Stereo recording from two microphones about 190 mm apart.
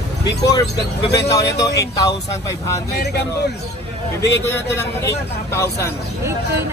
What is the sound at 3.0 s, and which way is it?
Speech, 60° left (ahead or behind).